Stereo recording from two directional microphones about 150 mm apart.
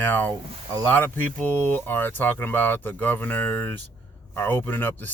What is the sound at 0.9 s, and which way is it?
Speech, 10° left (ahead or behind).